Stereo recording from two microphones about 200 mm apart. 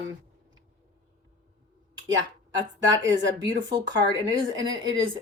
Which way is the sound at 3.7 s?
20° right (ahead or behind).